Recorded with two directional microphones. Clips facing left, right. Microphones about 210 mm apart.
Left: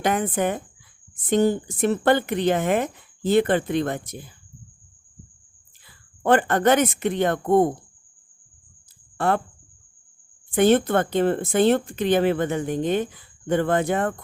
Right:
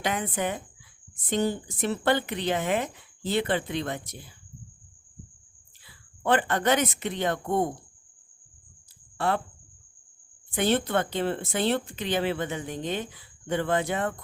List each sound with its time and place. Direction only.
0.0 s speech: 50° left (ahead or behind)
5.8 s speech: 50° left (ahead or behind)
9.1 s speech: 50° left (ahead or behind)
10.5 s speech: 50° left (ahead or behind)